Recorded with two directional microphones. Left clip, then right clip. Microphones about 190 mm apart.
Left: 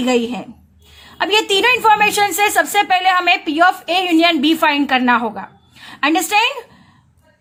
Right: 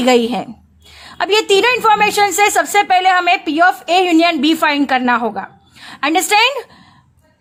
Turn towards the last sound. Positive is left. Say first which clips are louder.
# right 3 dB
turn(degrees=-30)  # may be behind; listen again after turning